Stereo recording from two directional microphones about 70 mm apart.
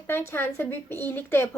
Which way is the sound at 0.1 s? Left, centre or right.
Left.